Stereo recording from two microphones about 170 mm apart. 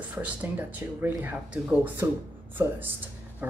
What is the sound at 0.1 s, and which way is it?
Speech, 10° right (ahead or behind).